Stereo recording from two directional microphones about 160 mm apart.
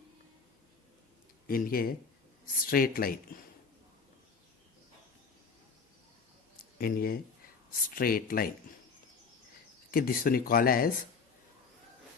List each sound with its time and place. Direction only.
1.5 s speech: 65° left (ahead or behind)
6.7 s speech: 70° left (ahead or behind)
9.9 s speech: 65° left (ahead or behind)